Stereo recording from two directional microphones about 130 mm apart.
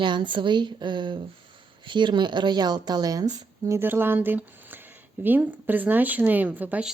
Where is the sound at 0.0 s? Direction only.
40° right (ahead or behind).